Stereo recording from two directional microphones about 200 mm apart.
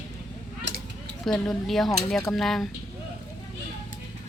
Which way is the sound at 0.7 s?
65° right (ahead or behind).